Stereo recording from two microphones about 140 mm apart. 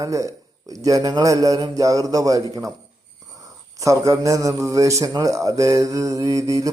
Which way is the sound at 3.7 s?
20° right (ahead or behind).